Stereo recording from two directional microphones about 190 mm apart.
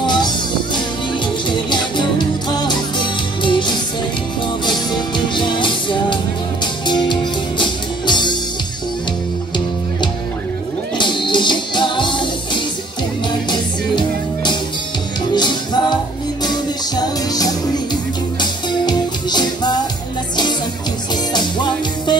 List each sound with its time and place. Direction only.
0.0 s music: 25° left (ahead or behind)
1.5 s music: 25° left (ahead or behind)
11.0 s music: 25° left (ahead or behind)
21.3 s music: 25° left (ahead or behind)